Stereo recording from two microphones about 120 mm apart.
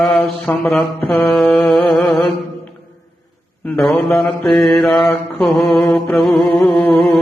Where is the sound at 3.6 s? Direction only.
10° left (ahead or behind).